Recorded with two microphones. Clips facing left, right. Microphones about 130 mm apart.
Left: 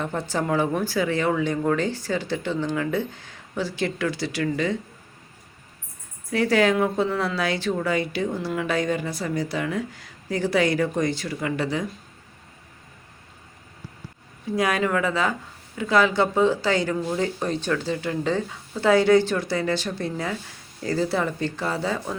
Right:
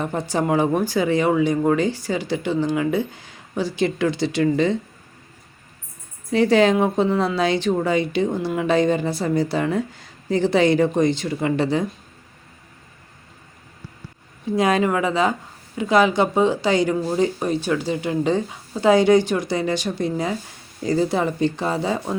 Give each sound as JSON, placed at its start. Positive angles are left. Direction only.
{"t": 0.0, "sound": "speech", "side_deg": -15}
{"t": 6.3, "sound": "a woman's voice", "side_deg": -25}
{"t": 14.5, "sound": "a woman's voice", "side_deg": -25}